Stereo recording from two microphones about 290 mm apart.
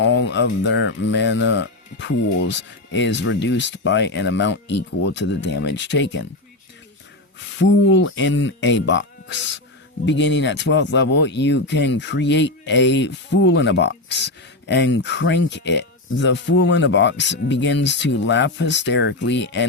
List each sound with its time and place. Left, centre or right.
0.0 s speech: left
7.3 s speech: left